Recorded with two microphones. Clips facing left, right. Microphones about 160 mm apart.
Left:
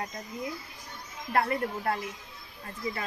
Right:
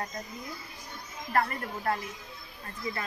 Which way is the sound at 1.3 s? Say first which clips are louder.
Left 2 dB; 10° left (ahead or behind).